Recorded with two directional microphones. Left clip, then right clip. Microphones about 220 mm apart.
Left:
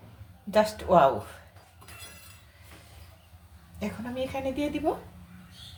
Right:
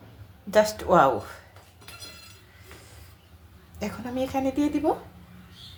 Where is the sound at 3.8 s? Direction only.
20° right (ahead or behind).